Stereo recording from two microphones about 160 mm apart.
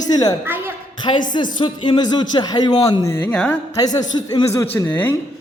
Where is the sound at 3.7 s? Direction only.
25° left (ahead or behind).